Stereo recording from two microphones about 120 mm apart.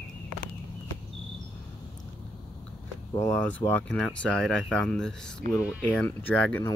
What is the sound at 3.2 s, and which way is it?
Speech, 10° left (ahead or behind).